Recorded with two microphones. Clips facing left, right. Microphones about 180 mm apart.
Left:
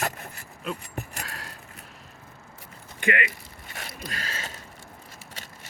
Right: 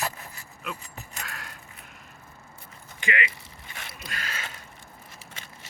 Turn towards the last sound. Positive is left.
turn(degrees=35)  # may be behind; listen again after turning